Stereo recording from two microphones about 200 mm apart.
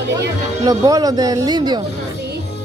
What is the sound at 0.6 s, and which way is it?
Speech, 20° right (ahead or behind).